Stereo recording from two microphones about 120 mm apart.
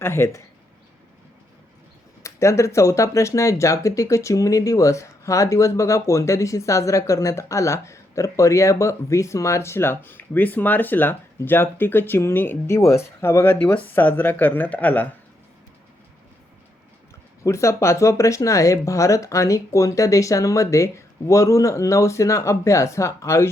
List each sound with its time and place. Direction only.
0.0 s speech: 20° left (ahead or behind)
2.2 s speech: 25° left (ahead or behind)
17.4 s speech: 25° left (ahead or behind)